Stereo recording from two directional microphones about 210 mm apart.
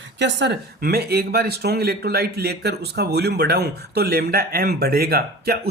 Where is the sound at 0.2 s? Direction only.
55° right (ahead or behind).